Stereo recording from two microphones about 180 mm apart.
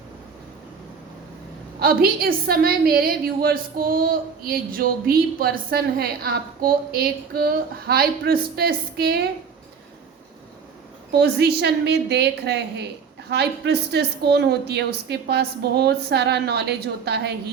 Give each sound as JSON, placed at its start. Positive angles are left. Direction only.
{"t": 1.8, "sound": "a woman's voice", "side_deg": -55}
{"t": 11.1, "sound": "a woman's voice", "side_deg": -65}